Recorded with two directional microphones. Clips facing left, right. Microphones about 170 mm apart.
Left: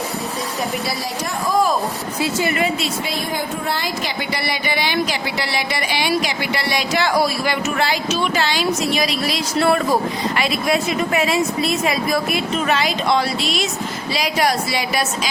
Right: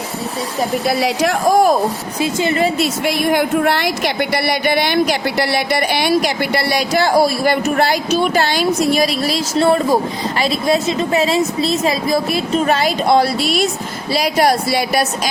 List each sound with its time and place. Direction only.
0.9 s speech: 75° right (ahead or behind)
2.1 s a woman's voice: 20° right (ahead or behind)
3.0 s speech: 75° right (ahead or behind); by 7.5 s 35° right (ahead or behind)
7.5 s speech: 45° right (ahead or behind)